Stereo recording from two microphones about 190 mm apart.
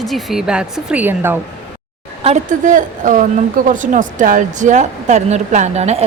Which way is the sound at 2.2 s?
40° right (ahead or behind).